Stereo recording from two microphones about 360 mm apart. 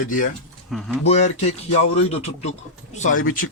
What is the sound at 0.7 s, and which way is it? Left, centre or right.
Speech, centre.